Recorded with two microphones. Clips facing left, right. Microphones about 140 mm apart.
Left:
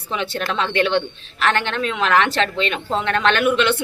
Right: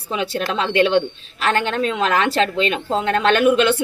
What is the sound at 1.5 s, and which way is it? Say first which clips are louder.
A woman's voice: right 2 dB; 40° right (ahead or behind).